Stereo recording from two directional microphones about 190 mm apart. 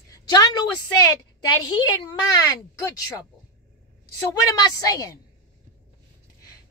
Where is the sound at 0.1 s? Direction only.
20° left (ahead or behind).